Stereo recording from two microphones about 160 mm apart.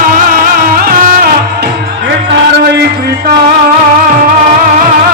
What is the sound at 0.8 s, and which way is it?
Music, 70° right (ahead or behind).